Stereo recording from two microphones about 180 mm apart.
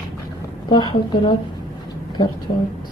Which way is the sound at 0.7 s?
25° left (ahead or behind).